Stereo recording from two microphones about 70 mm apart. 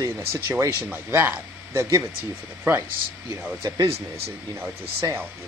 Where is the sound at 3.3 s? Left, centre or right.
Right.